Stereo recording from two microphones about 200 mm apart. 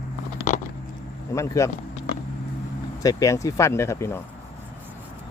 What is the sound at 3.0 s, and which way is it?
Speech, 15° left (ahead or behind).